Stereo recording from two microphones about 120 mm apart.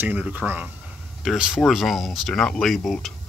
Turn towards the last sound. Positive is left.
turn(degrees=0)  # may be behind; listen again after turning